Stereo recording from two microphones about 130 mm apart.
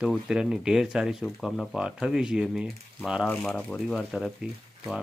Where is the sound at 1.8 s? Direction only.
5° right (ahead or behind).